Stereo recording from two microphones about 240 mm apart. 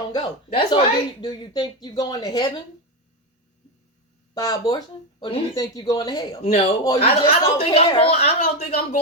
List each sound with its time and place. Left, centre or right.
0.1 s speech: centre
4.4 s speech: centre